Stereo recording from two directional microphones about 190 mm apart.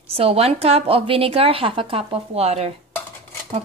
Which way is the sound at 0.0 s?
30° right (ahead or behind).